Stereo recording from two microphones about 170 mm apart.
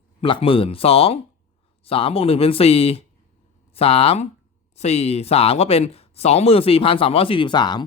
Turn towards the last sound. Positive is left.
turn(degrees=25)  # may be behind; listen again after turning